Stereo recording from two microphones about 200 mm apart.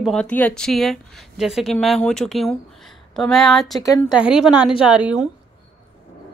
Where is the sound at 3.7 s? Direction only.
15° left (ahead or behind).